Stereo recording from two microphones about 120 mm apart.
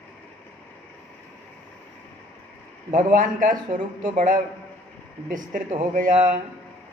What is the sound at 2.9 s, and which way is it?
Speech, 90° right.